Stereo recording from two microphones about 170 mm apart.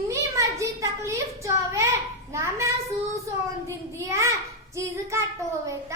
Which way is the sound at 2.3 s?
15° right (ahead or behind).